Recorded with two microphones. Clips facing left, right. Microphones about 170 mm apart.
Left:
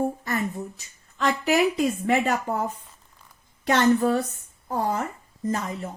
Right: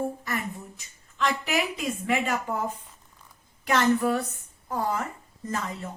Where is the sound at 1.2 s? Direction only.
40° left (ahead or behind).